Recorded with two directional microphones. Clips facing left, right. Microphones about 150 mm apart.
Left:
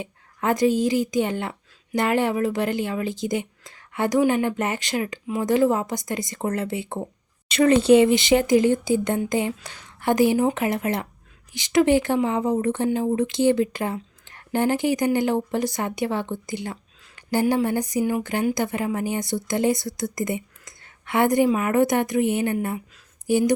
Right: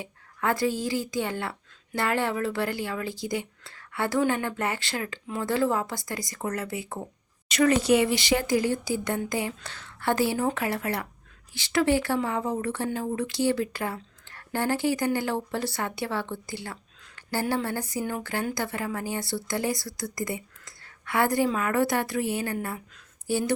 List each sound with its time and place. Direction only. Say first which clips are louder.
0.0 s a woman's voice: left 3 dB; 20° left (ahead or behind)